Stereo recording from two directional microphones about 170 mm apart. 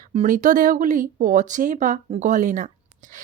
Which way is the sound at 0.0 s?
45° right (ahead or behind).